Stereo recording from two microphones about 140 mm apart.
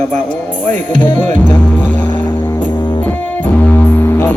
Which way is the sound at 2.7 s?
35° left (ahead or behind).